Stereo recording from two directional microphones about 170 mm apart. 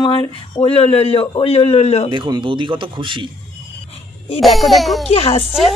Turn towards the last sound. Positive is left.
turn(degrees=0)  # may be behind; listen again after turning